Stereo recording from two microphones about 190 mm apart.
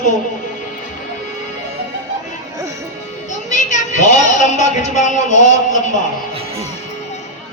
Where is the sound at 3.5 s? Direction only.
40° left (ahead or behind).